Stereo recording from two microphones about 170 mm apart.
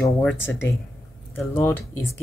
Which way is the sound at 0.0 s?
5° left (ahead or behind).